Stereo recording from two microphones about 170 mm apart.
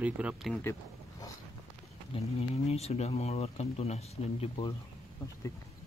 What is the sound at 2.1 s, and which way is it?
Speech, 35° left (ahead or behind).